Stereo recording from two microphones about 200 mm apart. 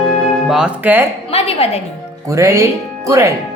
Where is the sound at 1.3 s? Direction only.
30° left (ahead or behind).